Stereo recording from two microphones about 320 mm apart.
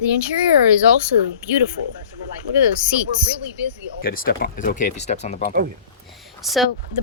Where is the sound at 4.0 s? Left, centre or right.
Left.